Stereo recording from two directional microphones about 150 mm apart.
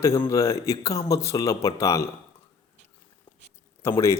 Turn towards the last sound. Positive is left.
turn(degrees=20)  # may be behind; listen again after turning